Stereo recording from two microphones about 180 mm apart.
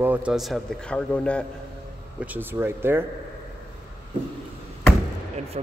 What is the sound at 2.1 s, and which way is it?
Speech, 10° right (ahead or behind).